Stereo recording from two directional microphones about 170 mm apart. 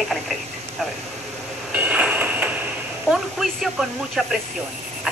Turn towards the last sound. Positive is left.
turn(degrees=0)  # may be behind; listen again after turning